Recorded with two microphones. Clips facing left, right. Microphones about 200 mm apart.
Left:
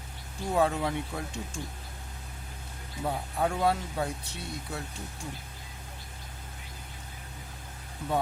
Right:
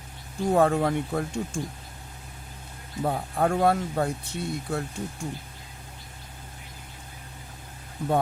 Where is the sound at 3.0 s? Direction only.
50° right (ahead or behind).